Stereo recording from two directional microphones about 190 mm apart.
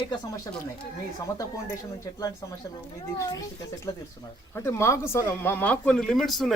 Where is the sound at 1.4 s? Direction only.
20° left (ahead or behind).